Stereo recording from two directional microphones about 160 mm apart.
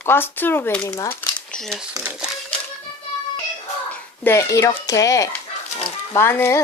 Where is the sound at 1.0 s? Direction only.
20° left (ahead or behind).